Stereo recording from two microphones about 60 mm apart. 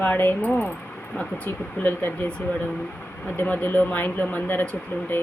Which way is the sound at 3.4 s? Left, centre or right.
Left.